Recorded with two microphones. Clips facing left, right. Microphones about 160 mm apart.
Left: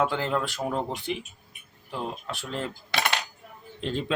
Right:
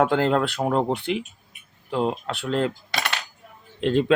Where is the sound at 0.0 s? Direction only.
60° right (ahead or behind).